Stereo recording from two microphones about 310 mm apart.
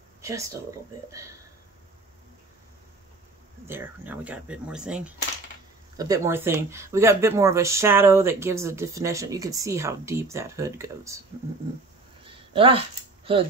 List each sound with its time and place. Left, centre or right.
0.2 s speech: centre
3.6 s speech: centre
12.3 s a sound: centre